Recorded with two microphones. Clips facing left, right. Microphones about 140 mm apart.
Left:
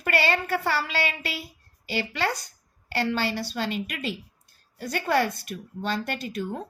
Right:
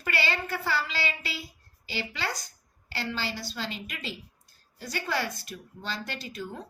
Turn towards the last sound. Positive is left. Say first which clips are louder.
# left 7 dB
turn(degrees=55)  # may be behind; listen again after turning